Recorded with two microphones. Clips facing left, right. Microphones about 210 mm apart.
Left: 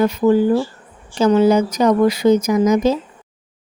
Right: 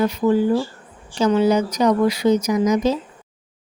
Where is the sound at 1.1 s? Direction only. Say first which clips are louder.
Left 3 dB; 50° left (ahead or behind).